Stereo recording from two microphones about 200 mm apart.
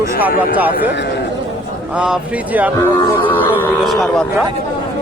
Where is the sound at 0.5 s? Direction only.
10° right (ahead or behind).